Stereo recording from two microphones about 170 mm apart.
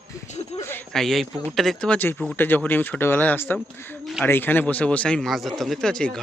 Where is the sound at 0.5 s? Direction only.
35° left (ahead or behind).